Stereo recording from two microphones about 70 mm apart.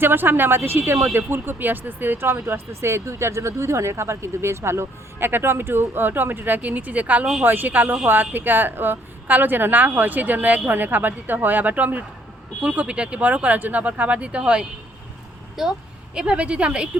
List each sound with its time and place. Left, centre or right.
0.0 s a woman's voice: right